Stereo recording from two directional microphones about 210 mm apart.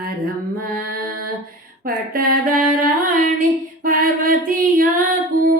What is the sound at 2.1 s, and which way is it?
Music, 45° right (ahead or behind).